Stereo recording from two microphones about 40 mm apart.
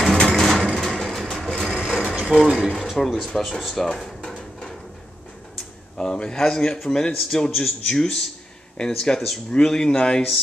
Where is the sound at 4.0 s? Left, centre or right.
Centre.